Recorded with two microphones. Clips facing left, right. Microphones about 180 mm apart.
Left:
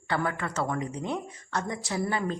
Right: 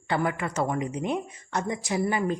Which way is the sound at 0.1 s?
15° right (ahead or behind).